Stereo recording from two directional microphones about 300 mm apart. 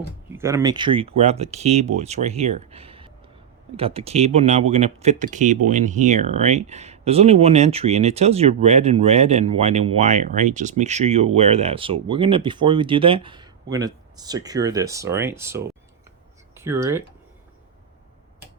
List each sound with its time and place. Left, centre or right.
0.3 s speech: centre